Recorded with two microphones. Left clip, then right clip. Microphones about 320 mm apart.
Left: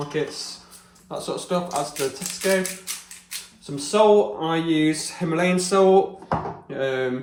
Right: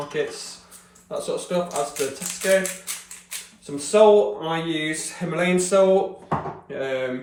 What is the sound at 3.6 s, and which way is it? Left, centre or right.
Speech, centre.